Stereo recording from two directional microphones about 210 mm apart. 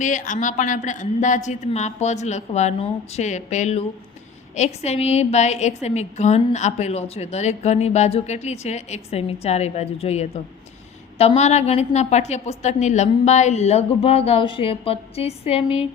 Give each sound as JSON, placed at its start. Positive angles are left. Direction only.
{"t": 0.0, "sound": "a woman's voice", "side_deg": 35}